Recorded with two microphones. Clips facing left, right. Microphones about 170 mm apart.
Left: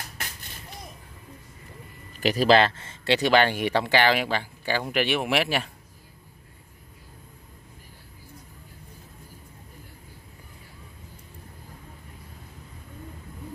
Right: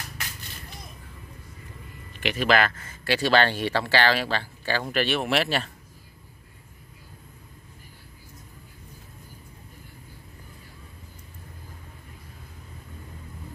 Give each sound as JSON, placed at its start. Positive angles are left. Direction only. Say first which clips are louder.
{"t": 2.1, "sound": "speech", "louder": "left 4 dB", "side_deg": 35}